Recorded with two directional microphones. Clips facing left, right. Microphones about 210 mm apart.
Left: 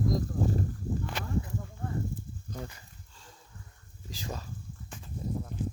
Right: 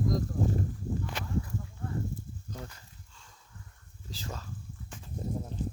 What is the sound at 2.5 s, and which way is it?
Dog, 10° left (ahead or behind).